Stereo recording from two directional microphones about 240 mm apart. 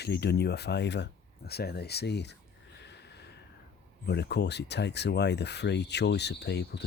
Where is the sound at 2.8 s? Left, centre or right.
Left.